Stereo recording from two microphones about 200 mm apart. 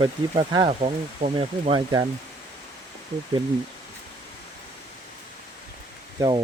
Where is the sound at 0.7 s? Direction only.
30° right (ahead or behind).